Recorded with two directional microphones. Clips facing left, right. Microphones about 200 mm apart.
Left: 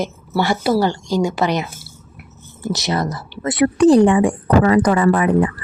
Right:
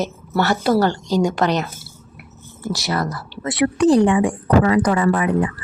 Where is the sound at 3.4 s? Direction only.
50° left (ahead or behind).